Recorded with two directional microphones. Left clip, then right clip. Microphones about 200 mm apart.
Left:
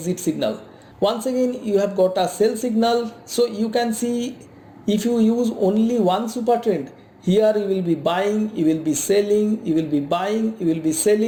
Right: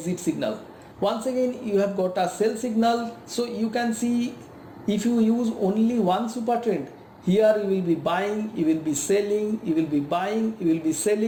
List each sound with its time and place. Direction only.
0.0 s speech: 50° left (ahead or behind)